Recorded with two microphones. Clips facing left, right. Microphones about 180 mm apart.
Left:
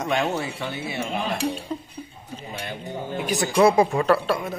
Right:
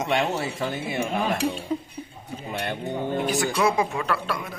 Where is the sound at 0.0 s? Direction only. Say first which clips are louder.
Even; 35° right (ahead or behind).